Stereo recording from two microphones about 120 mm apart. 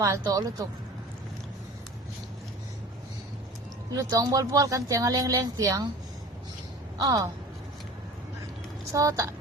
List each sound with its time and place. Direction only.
0.0 s speech: 25° right (ahead or behind)
3.9 s speech: 30° right (ahead or behind)
7.0 s a woman's voice: 30° right (ahead or behind)
8.9 s speech: 25° right (ahead or behind)